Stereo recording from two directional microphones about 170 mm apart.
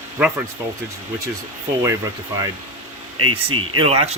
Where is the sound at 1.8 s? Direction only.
15° right (ahead or behind).